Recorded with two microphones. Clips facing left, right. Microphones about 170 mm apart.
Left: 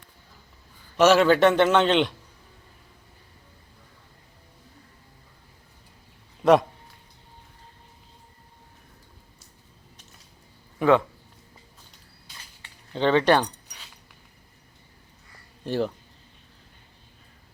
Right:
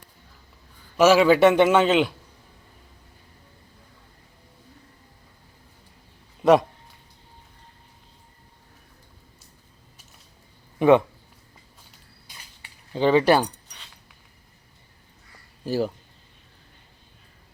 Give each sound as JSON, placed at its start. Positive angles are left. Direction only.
{"t": 0.9, "sound": "a man's voice", "side_deg": -10}
{"t": 6.4, "sound": "speech", "side_deg": 0}
{"t": 10.8, "sound": "a sound", "side_deg": -20}
{"t": 12.6, "sound": "speech", "side_deg": -10}
{"t": 15.6, "sound": "speech", "side_deg": -5}